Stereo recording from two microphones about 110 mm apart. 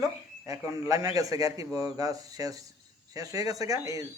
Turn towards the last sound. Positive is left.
turn(degrees=-30)  # may be behind; listen again after turning